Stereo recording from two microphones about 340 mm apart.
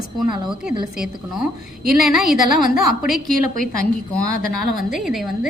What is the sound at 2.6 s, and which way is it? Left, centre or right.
Speech, left.